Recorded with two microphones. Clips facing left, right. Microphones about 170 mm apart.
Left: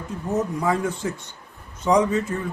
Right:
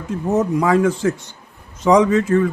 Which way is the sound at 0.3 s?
90° right.